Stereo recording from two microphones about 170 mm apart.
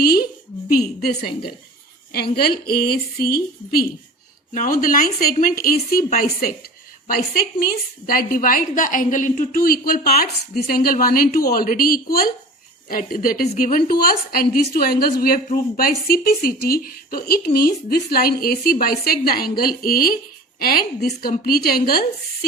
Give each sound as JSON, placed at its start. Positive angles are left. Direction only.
{"t": 1.3, "sound": "a woman's voice", "side_deg": 30}
{"t": 2.1, "sound": "a woman's voice", "side_deg": 65}
{"t": 4.5, "sound": "a woman's voice", "side_deg": 55}